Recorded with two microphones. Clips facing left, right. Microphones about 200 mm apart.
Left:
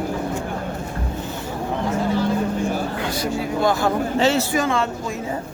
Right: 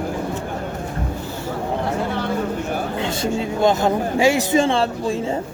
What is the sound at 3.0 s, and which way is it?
Speech, 25° right (ahead or behind).